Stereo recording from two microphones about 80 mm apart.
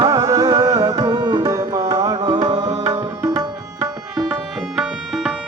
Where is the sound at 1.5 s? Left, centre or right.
Right.